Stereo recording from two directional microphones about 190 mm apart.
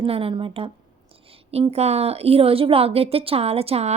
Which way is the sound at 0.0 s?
30° right (ahead or behind).